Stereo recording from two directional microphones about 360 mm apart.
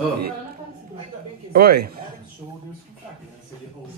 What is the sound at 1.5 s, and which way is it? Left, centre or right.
Speech, right.